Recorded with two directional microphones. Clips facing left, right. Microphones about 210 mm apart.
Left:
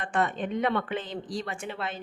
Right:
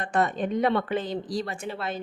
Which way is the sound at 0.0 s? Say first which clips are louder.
Right 3 dB; 40° right (ahead or behind).